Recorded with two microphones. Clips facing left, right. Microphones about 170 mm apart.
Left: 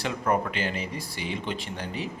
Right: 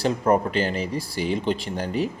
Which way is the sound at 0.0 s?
35° right (ahead or behind).